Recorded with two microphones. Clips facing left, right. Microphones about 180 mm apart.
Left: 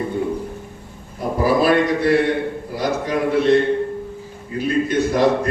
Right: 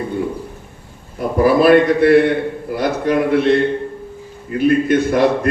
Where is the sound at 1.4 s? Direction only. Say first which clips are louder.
Right 5 dB; 60° right (ahead or behind).